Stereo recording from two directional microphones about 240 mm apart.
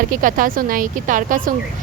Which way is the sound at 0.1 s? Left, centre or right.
Right.